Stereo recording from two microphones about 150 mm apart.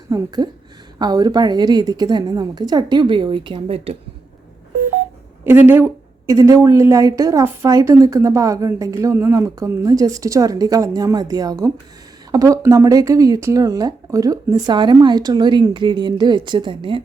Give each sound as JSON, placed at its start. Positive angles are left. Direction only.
{"t": 0.4, "sound": "speech", "side_deg": -25}
{"t": 5.5, "sound": "a woman's voice", "side_deg": -15}